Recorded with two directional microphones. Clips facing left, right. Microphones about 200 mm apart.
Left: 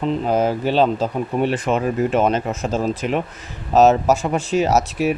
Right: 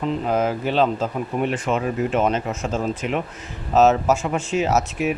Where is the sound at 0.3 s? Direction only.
35° left (ahead or behind).